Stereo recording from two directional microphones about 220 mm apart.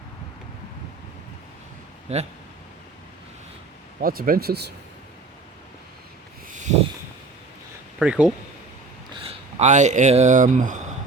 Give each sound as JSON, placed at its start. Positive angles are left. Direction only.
{"t": 2.1, "sound": "speech", "side_deg": -30}
{"t": 4.0, "sound": "speech", "side_deg": -40}
{"t": 7.9, "sound": "speech", "side_deg": -5}
{"t": 9.1, "sound": "speech", "side_deg": -30}